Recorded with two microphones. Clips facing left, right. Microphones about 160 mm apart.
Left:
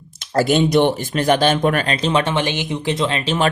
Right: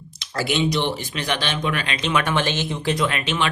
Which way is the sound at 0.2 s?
45° left (ahead or behind).